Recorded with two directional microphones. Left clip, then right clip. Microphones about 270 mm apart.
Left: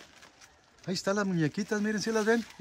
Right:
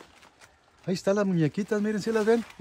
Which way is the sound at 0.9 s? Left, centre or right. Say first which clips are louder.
Right 5 dB; centre.